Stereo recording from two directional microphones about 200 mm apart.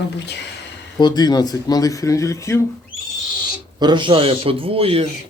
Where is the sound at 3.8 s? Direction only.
20° right (ahead or behind).